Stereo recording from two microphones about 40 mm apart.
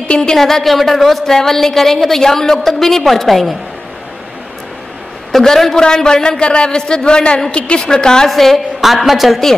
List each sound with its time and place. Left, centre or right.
0.2 s a woman's voice: centre
5.3 s a woman's voice: centre
8.3 s a woman's voice: centre